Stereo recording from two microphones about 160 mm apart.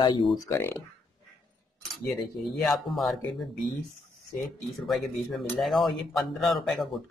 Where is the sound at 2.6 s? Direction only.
Centre (ahead or behind).